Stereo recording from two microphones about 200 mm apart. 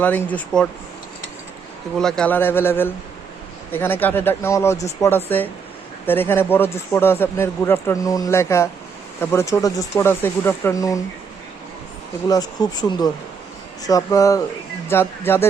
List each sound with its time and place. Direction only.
0.0 s speech: 10° left (ahead or behind)
2.0 s speech: 5° left (ahead or behind)
12.3 s speech: 20° left (ahead or behind)